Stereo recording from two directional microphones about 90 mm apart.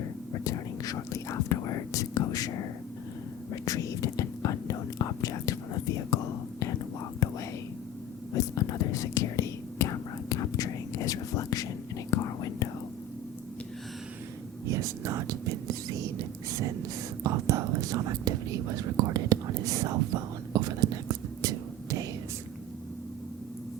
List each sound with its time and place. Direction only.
0.4 s whispering: 40° left (ahead or behind)
3.5 s whispering: 40° left (ahead or behind)
7.2 s whispering: 35° left (ahead or behind)
8.4 s whispering: 40° left (ahead or behind)
14.7 s whispering: 35° right (ahead or behind)